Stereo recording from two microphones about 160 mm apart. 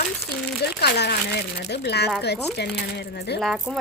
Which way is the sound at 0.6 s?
90° left.